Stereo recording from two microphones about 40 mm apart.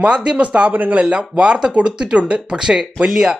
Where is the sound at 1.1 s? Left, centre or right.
Right.